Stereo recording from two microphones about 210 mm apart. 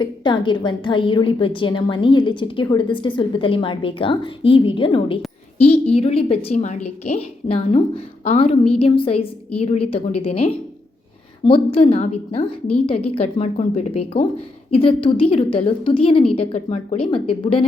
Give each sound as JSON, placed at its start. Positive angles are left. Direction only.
{"t": 0.0, "sound": "a woman's voice", "side_deg": 20}